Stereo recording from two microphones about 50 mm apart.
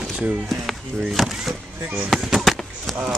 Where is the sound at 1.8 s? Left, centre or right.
Right.